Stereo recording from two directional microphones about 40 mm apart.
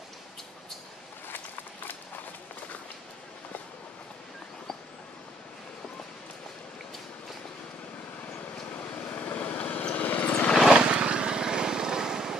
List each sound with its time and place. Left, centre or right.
8.9 s vehicle: left
10.7 s vehicle: right